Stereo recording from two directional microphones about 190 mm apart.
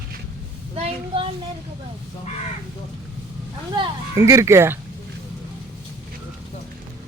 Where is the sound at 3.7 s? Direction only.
20° right (ahead or behind).